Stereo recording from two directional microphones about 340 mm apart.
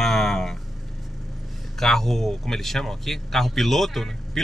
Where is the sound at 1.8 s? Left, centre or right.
Centre.